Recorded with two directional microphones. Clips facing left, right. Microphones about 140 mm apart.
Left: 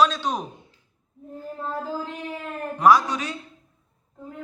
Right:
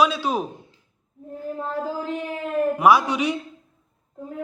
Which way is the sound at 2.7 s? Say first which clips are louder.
Left 1 dB; 10° right (ahead or behind).